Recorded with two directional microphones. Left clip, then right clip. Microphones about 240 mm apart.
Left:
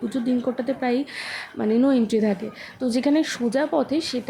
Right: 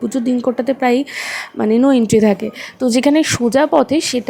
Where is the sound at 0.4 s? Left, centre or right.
Right.